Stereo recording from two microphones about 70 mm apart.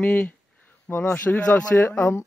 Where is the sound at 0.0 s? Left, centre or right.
Centre.